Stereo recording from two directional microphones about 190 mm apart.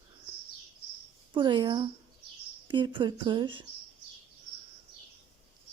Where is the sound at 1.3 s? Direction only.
25° right (ahead or behind).